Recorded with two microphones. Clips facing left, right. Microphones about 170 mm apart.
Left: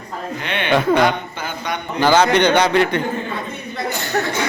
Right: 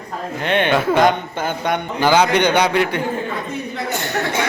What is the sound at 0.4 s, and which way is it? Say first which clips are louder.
Speech: right 8 dB; 45° right (ahead or behind).